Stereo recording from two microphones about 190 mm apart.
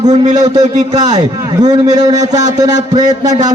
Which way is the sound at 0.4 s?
20° right (ahead or behind).